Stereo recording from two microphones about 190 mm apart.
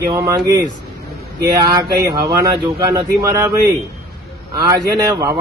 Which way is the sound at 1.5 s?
20° right (ahead or behind).